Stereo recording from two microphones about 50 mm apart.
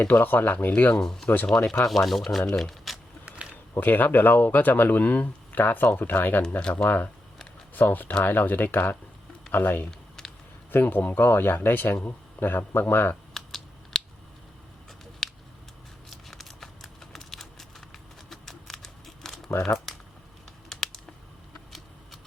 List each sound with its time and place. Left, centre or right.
0.1 s speech: left
1.0 s speech: centre
2.6 s shuffling cards: centre
3.8 s speech: left
6.6 s speech: centre
6.8 s speech: left
10.2 s a sound: centre
10.7 s speech: left
11.2 s speech: left
13.3 s typing: centre
15.2 s a sound: centre
20.7 s a sound: centre